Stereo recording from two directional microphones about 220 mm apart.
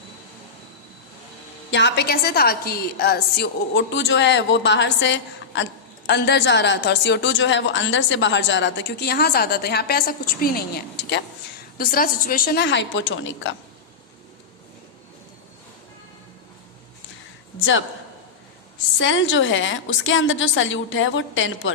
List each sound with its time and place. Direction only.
1.7 s speech: 50° left (ahead or behind)
18.9 s a woman's voice: 60° left (ahead or behind)